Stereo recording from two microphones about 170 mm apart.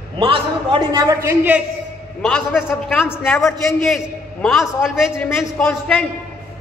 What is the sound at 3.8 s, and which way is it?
A man's voice, centre (ahead or behind).